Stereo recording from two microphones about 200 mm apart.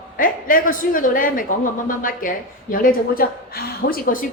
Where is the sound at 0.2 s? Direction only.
45° left (ahead or behind).